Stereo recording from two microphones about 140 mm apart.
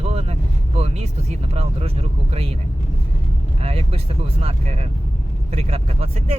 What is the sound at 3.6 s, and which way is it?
Speech, 45° right (ahead or behind).